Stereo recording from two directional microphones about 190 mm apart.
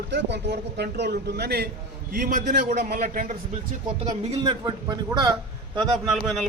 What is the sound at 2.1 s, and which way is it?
A man's voice, 45° right (ahead or behind).